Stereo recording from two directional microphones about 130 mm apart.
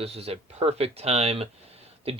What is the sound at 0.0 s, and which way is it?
Speech, 50° right (ahead or behind).